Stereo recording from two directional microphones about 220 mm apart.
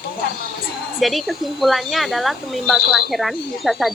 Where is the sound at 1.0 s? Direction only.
Centre (ahead or behind).